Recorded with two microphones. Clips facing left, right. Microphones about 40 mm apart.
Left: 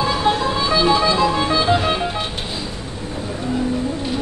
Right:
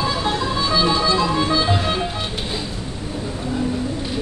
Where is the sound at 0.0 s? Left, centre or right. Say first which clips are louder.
Left 3 dB; centre.